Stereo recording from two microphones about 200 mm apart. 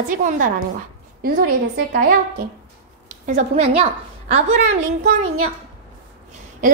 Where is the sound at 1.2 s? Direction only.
50° right (ahead or behind).